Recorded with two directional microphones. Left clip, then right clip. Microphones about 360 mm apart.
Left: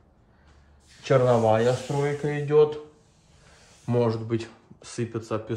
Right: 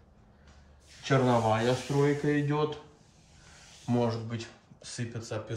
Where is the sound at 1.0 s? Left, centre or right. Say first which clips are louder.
Left 6 dB; left.